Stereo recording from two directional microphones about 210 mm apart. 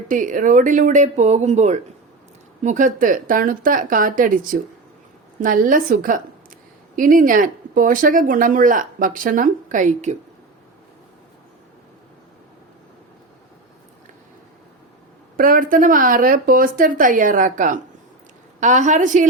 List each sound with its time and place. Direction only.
0.1 s speech: 40° right (ahead or behind)
15.4 s speech: 40° right (ahead or behind)